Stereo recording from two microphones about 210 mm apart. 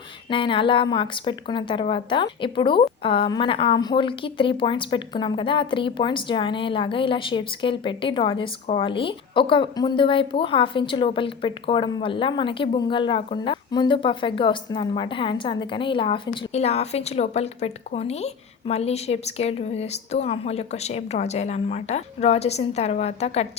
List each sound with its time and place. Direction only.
0.3 s a woman's voice: 25° left (ahead or behind)